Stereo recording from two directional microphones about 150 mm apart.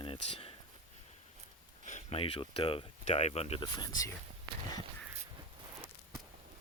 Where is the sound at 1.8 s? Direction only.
55° left (ahead or behind).